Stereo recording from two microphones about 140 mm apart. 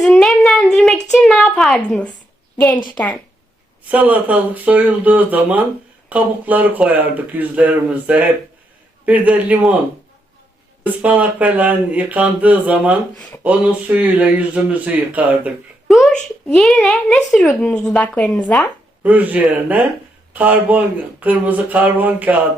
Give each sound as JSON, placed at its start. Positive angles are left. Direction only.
{"t": 0.0, "sound": "a sound", "side_deg": 0}
{"t": 2.6, "sound": "a woman's voice", "side_deg": 20}
{"t": 3.8, "sound": "speech", "side_deg": -10}
{"t": 10.8, "sound": "speech", "side_deg": -10}
{"t": 19.0, "sound": "speech", "side_deg": -10}